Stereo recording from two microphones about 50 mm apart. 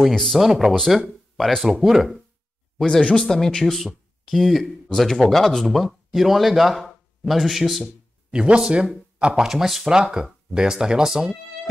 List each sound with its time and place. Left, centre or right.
0.1 s speech: centre
0.4 s speech: centre
3.0 s speech: left
3.3 s speech: centre
7.8 s speech: right
9.3 s speech: centre